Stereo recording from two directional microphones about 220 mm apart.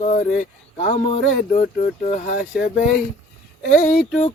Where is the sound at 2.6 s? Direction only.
45° left (ahead or behind).